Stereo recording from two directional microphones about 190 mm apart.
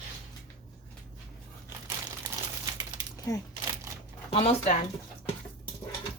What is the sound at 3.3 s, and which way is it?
Speech, 20° left (ahead or behind).